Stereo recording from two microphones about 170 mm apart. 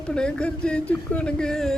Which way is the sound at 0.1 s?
5° left (ahead or behind).